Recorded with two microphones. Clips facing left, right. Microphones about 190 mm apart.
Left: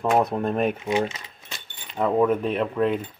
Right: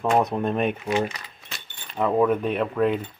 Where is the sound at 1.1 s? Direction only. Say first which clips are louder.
Even; 25° left (ahead or behind).